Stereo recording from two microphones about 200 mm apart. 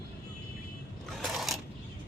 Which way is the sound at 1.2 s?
Centre (ahead or behind).